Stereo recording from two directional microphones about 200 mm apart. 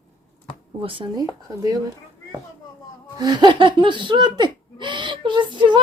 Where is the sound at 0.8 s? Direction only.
25° right (ahead or behind).